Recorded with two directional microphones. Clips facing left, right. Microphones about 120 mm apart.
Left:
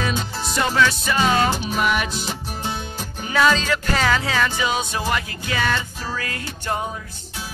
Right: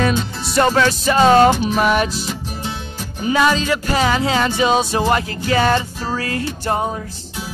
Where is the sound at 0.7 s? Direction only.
40° right (ahead or behind).